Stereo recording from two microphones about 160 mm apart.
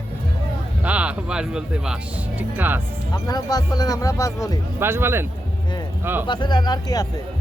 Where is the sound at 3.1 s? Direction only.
25° left (ahead or behind).